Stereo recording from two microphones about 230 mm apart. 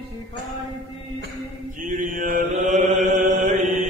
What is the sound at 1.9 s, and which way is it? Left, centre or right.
Chant, right.